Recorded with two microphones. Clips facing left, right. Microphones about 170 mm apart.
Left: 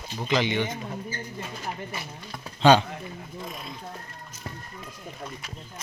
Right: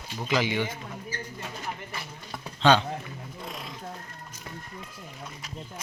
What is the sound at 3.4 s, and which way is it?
Speech, 80° right.